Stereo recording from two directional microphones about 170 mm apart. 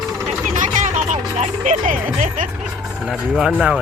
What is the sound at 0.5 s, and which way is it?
Music, 50° right (ahead or behind).